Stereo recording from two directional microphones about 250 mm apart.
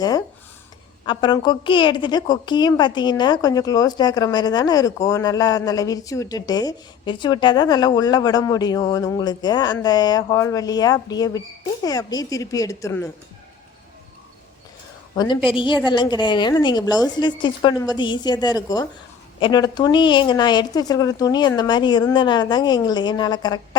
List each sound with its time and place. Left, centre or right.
0.0 s a woman's voice: centre
15.1 s a woman's voice: centre